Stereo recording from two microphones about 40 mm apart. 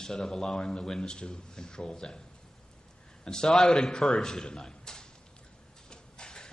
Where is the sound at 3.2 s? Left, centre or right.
Centre.